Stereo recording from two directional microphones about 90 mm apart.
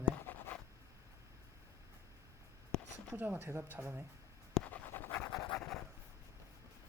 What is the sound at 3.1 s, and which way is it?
Speech, 20° right (ahead or behind).